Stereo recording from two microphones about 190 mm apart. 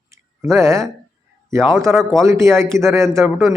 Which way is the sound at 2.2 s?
15° right (ahead or behind).